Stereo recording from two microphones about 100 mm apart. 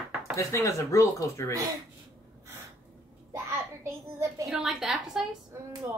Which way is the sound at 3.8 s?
30° right (ahead or behind).